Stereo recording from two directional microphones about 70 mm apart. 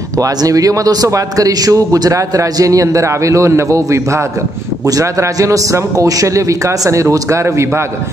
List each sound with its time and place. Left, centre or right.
0.2 s a man's voice: right